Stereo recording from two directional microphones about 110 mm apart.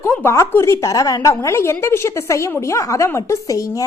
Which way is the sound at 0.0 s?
20° left (ahead or behind).